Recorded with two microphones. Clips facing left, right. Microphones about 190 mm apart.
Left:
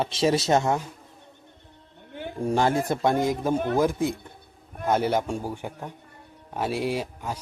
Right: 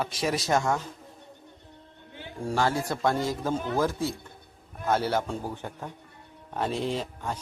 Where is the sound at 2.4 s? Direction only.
20° left (ahead or behind).